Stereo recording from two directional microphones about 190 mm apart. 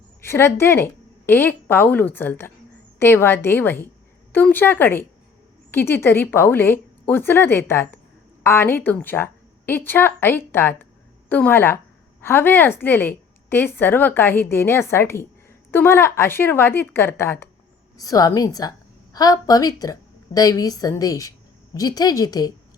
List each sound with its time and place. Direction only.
0.2 s a woman's voice: 15° left (ahead or behind)